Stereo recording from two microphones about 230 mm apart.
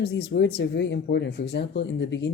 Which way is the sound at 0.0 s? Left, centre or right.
Left.